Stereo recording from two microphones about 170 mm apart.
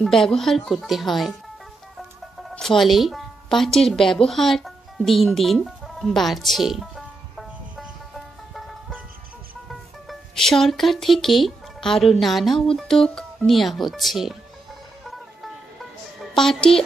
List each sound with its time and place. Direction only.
0.0 s speech: 5° left (ahead or behind)
2.5 s speech: centre (ahead or behind)
8.5 s music: centre (ahead or behind)
9.7 s speech: centre (ahead or behind)
16.2 s a woman's voice: 5° left (ahead or behind)